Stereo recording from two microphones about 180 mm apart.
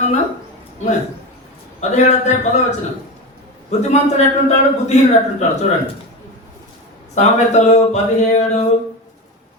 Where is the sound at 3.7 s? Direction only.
40° left (ahead or behind).